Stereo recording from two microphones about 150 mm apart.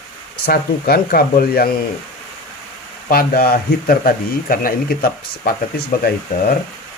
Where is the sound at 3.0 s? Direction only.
85° left.